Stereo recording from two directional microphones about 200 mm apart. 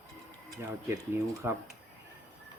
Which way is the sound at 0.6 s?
15° right (ahead or behind).